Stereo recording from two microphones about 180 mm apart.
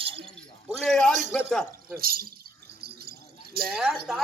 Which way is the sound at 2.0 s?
55° right (ahead or behind).